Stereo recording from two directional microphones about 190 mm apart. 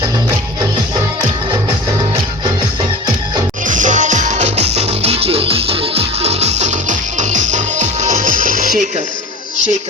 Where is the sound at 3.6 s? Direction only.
40° right (ahead or behind).